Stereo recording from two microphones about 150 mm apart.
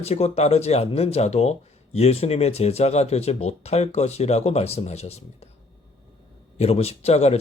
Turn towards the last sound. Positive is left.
turn(degrees=45)  # may be behind; listen again after turning